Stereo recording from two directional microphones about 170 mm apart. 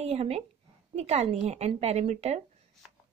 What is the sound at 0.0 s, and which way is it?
A woman's voice, 40° right (ahead or behind).